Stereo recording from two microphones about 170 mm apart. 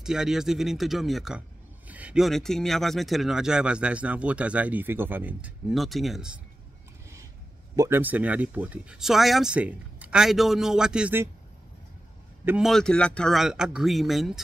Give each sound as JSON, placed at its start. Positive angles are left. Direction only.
{"t": 0.0, "sound": "speech", "side_deg": -5}
{"t": 7.7, "sound": "a man's voice", "side_deg": -20}
{"t": 8.0, "sound": "speech", "side_deg": -10}
{"t": 12.4, "sound": "speech", "side_deg": 0}